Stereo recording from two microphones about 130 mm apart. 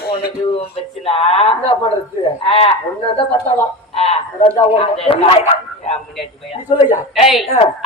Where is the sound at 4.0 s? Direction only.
45° left (ahead or behind).